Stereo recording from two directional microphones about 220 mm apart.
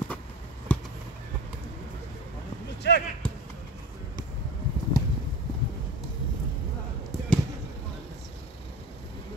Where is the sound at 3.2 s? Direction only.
5° left (ahead or behind).